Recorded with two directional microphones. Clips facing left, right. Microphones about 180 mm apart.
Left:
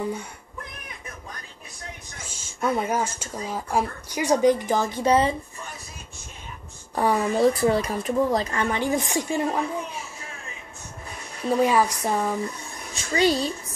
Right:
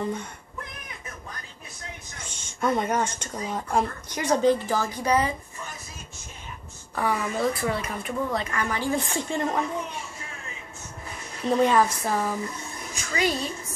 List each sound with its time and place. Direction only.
0.0 s speech: 10° left (ahead or behind)
2.2 s speech: 5° left (ahead or behind); by 5.3 s 25° left (ahead or behind)
7.0 s speech: 30° left (ahead or behind); by 10.0 s 5° left (ahead or behind)
11.4 s speech: 5° left (ahead or behind)
12.9 s a woman's voice: 30° left (ahead or behind)